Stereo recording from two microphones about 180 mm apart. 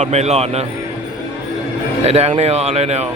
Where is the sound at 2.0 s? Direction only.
35° right (ahead or behind).